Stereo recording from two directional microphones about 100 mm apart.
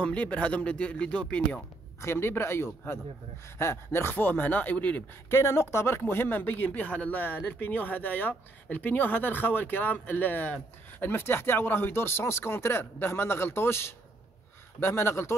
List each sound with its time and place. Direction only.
0.0 s speech: 15° left (ahead or behind)
2.0 s speech: 25° left (ahead or behind)
5.4 s speech: 25° left (ahead or behind)